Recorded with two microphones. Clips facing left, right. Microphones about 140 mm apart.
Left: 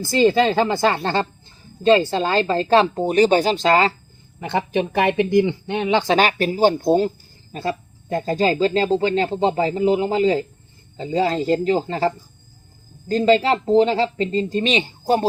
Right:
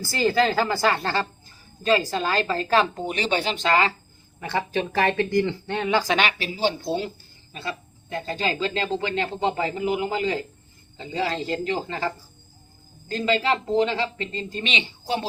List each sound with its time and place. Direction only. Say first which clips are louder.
0.0 s speech: left 5 dB; 20° left (ahead or behind)
4.4 s speech: left 4 dB; 20° left (ahead or behind)
6.1 s speech: left 7 dB; 45° left (ahead or behind)